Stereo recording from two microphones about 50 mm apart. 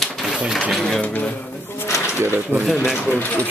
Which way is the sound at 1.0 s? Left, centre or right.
Left.